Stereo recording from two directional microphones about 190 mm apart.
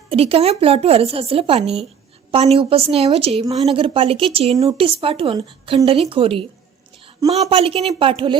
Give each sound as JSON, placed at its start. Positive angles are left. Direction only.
{"t": 0.1, "sound": "a woman's voice", "side_deg": -30}
{"t": 7.5, "sound": "speech", "side_deg": -30}